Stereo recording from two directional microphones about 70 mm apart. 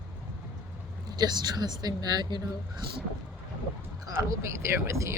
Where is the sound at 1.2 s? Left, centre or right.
Right.